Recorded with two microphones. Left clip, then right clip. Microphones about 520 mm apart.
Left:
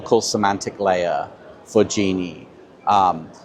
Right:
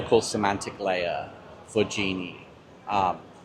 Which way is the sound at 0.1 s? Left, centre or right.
Left.